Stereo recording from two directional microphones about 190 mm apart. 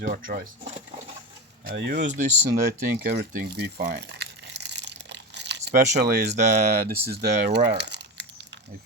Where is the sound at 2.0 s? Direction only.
40° right (ahead or behind).